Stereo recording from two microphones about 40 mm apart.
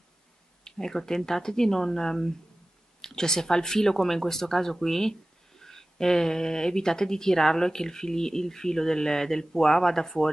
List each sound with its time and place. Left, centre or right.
0.7 s speech: centre